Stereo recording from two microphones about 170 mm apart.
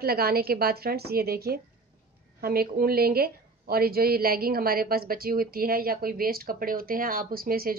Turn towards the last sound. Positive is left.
turn(degrees=-60)  # may be behind; listen again after turning